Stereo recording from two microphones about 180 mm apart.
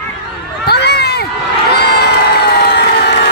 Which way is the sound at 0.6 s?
65° left (ahead or behind).